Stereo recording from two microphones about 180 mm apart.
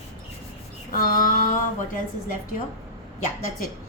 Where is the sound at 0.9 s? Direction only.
50° left (ahead or behind).